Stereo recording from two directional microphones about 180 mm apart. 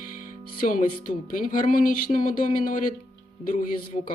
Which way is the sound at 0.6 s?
50° left (ahead or behind).